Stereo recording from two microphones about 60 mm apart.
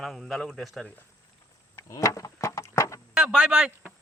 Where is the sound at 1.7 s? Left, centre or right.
Left.